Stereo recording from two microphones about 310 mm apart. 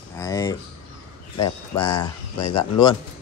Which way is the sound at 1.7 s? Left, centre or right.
Left.